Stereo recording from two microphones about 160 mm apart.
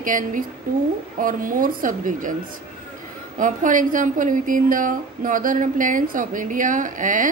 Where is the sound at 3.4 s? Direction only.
55° right (ahead or behind).